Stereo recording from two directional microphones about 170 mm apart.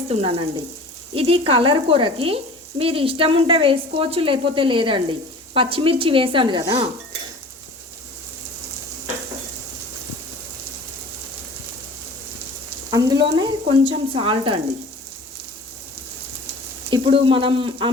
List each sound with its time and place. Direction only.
0.1 s speech: 35° right (ahead or behind)
12.9 s speech: 20° right (ahead or behind)
16.9 s speech: 30° right (ahead or behind)